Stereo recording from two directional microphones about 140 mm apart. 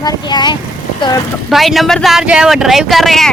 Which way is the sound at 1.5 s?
Centre (ahead or behind).